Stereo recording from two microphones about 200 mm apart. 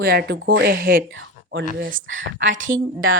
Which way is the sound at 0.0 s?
50° right (ahead or behind).